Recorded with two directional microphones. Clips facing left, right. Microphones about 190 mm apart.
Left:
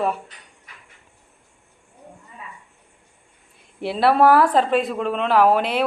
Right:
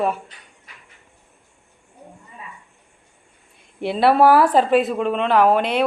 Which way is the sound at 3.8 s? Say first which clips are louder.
Right 1 dB; centre (ahead or behind).